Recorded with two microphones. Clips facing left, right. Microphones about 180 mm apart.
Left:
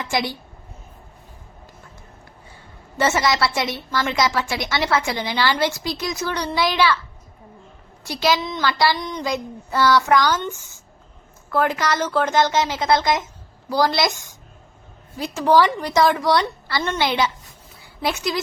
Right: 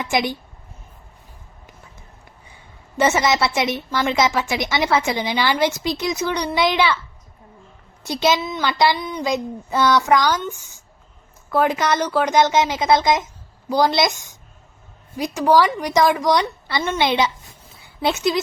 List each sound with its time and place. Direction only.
0.0 s a woman's voice: 20° right (ahead or behind)
3.0 s a woman's voice: 20° right (ahead or behind)
8.0 s a woman's voice: 20° right (ahead or behind)
8.4 s speech: 10° right (ahead or behind)
8.6 s a woman's voice: 20° right (ahead or behind)
9.0 s speech: 5° right (ahead or behind)
9.2 s a woman's voice: 20° right (ahead or behind)